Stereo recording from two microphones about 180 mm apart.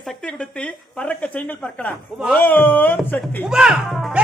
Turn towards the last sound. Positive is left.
turn(degrees=0)  # may be behind; listen again after turning